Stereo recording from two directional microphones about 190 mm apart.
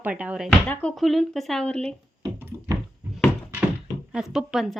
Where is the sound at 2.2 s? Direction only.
15° right (ahead or behind).